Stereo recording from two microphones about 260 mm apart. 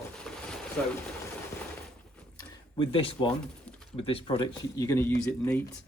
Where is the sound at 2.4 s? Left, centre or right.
Centre.